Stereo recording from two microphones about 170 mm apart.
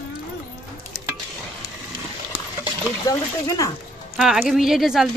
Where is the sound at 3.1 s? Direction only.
20° left (ahead or behind).